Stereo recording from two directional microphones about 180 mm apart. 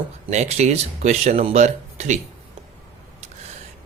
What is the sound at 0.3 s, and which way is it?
Speech, 40° right (ahead or behind).